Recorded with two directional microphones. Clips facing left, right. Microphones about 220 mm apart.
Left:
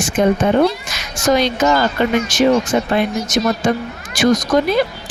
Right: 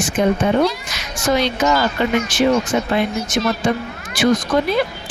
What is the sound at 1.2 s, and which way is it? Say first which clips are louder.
Speech: left 3 dB; 45° left (ahead or behind).